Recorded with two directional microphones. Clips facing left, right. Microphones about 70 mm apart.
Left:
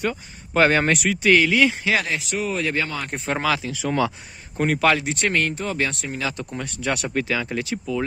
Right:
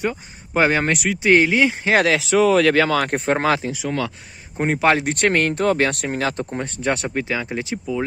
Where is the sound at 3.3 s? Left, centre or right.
Right.